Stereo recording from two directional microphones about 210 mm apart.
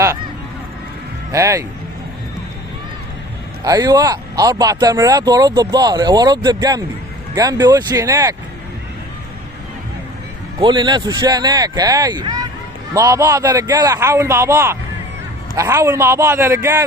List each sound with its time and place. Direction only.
1.3 s speech: 15° right (ahead or behind)
3.6 s speech: 15° right (ahead or behind)
10.6 s speech: 20° right (ahead or behind)